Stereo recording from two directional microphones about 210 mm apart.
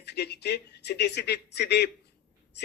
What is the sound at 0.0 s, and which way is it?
Speech, 55° left (ahead or behind).